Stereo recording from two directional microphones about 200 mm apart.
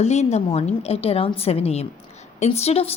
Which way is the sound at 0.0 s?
35° left (ahead or behind).